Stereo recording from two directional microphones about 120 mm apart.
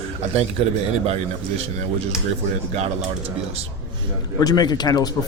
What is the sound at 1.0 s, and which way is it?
Speech, 55° right (ahead or behind).